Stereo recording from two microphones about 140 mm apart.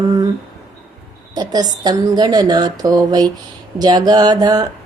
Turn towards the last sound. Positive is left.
turn(degrees=-30)  # may be behind; listen again after turning